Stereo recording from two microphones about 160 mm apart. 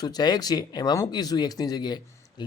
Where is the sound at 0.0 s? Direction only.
25° left (ahead or behind).